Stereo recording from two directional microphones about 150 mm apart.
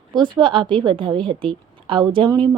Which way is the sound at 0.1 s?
30° right (ahead or behind).